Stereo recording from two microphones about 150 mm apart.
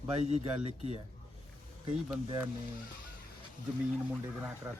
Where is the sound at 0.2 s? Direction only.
45° right (ahead or behind).